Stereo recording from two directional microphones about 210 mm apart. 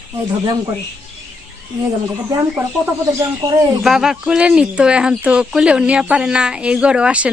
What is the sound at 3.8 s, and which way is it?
Speech, centre (ahead or behind).